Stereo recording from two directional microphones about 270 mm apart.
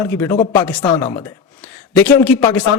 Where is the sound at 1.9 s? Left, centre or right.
Centre.